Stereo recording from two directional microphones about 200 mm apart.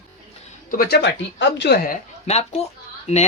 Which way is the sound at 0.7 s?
50° left (ahead or behind).